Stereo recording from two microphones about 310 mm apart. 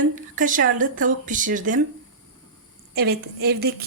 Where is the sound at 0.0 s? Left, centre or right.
Right.